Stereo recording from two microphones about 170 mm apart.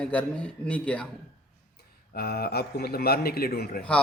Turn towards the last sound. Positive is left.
turn(degrees=65)  # may be behind; listen again after turning